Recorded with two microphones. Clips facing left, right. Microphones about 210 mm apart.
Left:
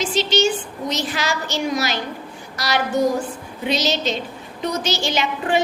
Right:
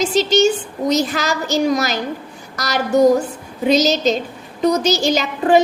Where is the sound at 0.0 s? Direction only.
40° right (ahead or behind).